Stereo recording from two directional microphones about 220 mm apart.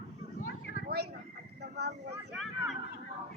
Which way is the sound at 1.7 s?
50° right (ahead or behind).